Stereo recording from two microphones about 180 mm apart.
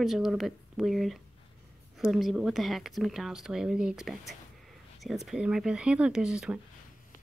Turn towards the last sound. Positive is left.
turn(degrees=-5)  # may be behind; listen again after turning